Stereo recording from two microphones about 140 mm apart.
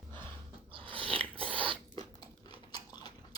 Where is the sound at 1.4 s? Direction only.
40° right (ahead or behind).